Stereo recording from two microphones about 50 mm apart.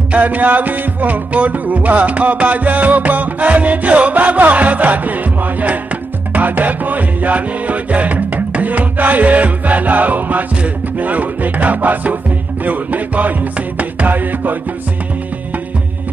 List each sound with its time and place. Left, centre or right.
0.1 s music: right